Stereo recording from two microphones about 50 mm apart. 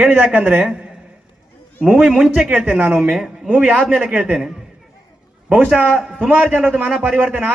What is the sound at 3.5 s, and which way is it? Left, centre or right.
Speech, right.